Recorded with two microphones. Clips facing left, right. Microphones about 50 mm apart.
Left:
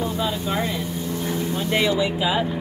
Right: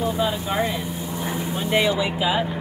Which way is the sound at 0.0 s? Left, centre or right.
Centre.